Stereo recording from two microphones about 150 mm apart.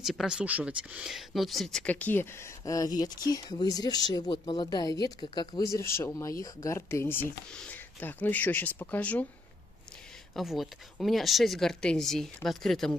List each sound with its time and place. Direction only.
0.0 s speech: centre (ahead or behind)
10.3 s speech: centre (ahead or behind)